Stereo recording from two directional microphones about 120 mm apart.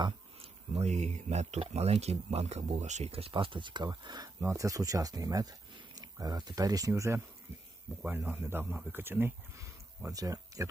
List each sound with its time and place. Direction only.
0.8 s speech: 70° right (ahead or behind); by 4.3 s 35° right (ahead or behind)
4.4 s speech: 25° right (ahead or behind)
8.0 s speech: 15° right (ahead or behind)